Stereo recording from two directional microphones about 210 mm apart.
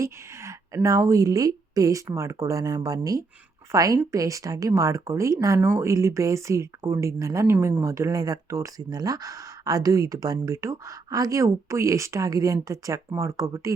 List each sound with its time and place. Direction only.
0.0 s speech: 15° right (ahead or behind)